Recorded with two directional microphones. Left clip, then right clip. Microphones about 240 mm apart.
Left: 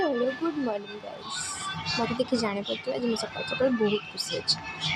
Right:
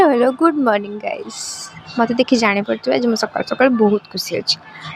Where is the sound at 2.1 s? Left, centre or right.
Right.